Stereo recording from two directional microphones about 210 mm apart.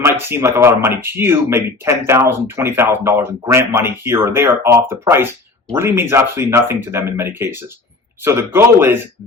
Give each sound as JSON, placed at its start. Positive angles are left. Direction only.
{"t": 0.0, "sound": "speech", "side_deg": -10}